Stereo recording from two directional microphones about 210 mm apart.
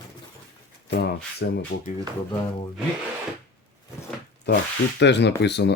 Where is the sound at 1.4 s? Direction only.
55° left (ahead or behind).